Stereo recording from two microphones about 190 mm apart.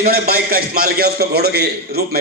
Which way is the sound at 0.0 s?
55° right (ahead or behind).